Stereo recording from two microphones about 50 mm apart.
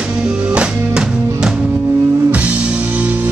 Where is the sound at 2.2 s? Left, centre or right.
Right.